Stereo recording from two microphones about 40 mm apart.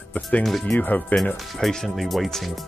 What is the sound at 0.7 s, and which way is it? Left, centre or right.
Speech, left.